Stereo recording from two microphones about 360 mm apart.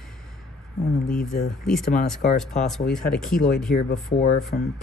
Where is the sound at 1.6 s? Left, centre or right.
Centre.